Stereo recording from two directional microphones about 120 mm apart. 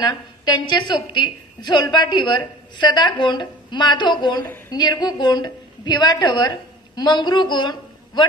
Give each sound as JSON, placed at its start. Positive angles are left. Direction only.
{"t": 0.0, "sound": "a woman's voice", "side_deg": 40}